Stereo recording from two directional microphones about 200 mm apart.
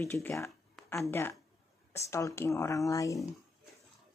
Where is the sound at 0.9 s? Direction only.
15° left (ahead or behind).